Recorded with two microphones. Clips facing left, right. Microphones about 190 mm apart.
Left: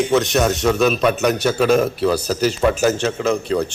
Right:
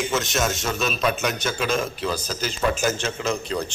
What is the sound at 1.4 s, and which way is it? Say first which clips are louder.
A man's voice: left 9 dB; 65° left (ahead or behind).